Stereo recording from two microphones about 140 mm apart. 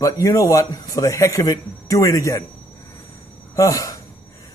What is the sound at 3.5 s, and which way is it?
Speech, 25° left (ahead or behind).